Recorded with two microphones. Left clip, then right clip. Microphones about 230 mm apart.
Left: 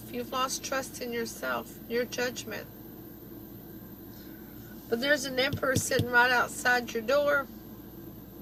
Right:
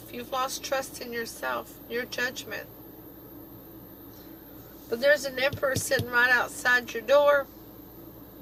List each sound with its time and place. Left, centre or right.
0.1 s speech: right
4.9 s speech: right